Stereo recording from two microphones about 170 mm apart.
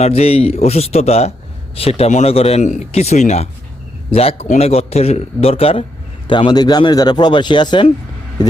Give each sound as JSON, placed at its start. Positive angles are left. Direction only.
{"t": 0.0, "sound": "a man's voice", "side_deg": 35}